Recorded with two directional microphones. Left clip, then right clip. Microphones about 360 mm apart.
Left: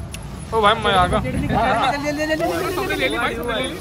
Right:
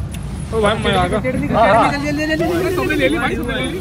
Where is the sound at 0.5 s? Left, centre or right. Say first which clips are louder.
Even; centre.